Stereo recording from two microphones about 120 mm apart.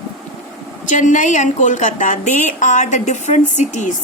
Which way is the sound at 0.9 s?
90° left.